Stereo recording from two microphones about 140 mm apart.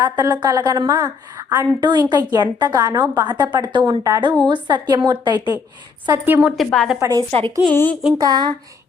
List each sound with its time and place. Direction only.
0.0 s a woman's voice: 30° right (ahead or behind)
6.2 s a woman's voice: 15° right (ahead or behind)
6.6 s a woman's voice: centre (ahead or behind)
7.0 s a woman's voice: 25° right (ahead or behind)
7.3 s speech: 40° right (ahead or behind)
7.6 s a woman's voice: 10° left (ahead or behind)
8.2 s a woman's voice: 30° right (ahead or behind)